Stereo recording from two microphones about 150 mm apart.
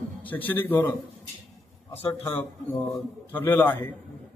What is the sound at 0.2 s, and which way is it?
Speech, 10° left (ahead or behind).